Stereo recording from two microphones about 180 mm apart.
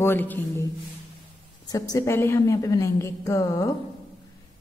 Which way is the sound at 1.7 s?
20° left (ahead or behind).